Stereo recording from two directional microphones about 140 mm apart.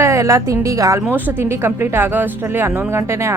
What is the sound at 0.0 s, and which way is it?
Speech, 20° right (ahead or behind).